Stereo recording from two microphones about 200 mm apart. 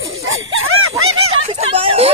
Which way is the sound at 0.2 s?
90° right.